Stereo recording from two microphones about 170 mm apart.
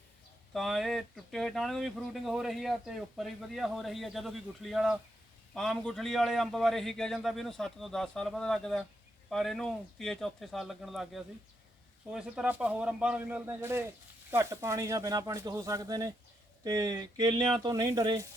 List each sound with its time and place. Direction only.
0.5 s a man's voice: centre (ahead or behind); by 18.3 s 25° right (ahead or behind)